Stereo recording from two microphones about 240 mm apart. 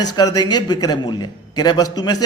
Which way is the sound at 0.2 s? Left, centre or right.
Centre.